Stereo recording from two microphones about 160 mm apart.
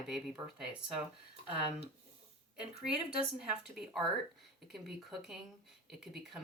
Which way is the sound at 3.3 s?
5° right (ahead or behind).